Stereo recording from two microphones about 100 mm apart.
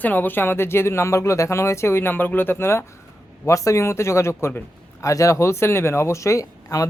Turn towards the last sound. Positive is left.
turn(degrees=35)  # may be behind; listen again after turning